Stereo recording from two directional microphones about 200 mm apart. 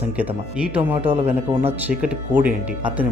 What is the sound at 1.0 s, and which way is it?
Speech, 30° right (ahead or behind).